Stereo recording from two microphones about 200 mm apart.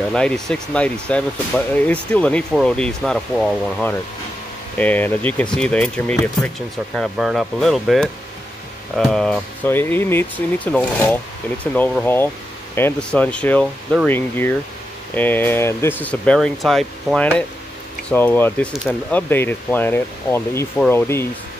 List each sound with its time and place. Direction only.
0.1 s speech: 5° left (ahead or behind)